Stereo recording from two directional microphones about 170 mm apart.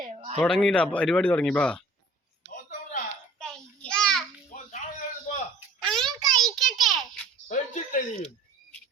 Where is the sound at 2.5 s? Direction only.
50° left (ahead or behind).